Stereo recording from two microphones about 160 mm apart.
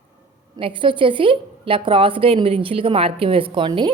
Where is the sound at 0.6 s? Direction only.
30° right (ahead or behind).